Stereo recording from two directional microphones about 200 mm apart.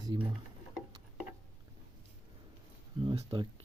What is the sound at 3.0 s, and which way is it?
Speech, 25° right (ahead or behind).